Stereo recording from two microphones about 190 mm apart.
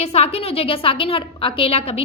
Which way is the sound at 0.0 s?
35° left (ahead or behind).